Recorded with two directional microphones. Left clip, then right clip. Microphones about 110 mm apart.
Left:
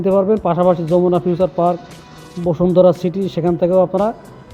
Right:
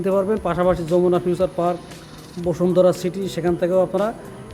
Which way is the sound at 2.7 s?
30° left (ahead or behind).